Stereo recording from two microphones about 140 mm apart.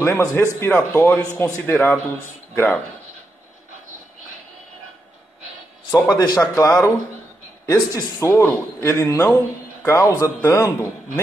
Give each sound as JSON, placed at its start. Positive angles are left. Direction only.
{"t": 0.0, "sound": "speech", "side_deg": 20}
{"t": 5.9, "sound": "a man's voice", "side_deg": 25}